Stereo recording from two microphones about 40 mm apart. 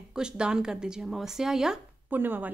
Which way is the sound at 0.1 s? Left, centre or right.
Centre.